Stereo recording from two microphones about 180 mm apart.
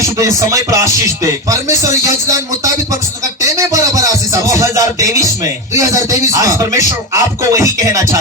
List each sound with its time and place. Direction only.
0.2 s speech: 20° right (ahead or behind)
3.4 s music: 20° right (ahead or behind)
4.6 s speech: 20° right (ahead or behind)